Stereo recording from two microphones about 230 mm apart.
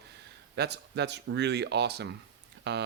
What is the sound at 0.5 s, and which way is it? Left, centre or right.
Speech, right.